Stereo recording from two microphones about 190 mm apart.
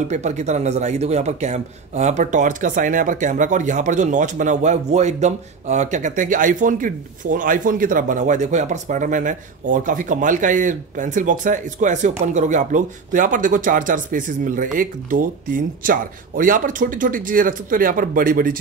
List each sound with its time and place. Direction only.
0.1 s a man's voice: 35° right (ahead or behind)